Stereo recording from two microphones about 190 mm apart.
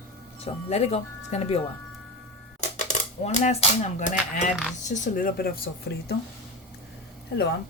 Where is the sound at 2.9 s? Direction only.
35° left (ahead or behind); by 6.1 s 55° left (ahead or behind).